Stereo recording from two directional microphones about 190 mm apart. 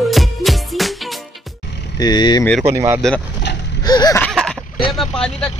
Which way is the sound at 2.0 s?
20° left (ahead or behind).